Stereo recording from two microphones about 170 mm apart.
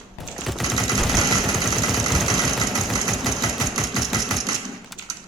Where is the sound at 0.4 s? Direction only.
Centre (ahead or behind).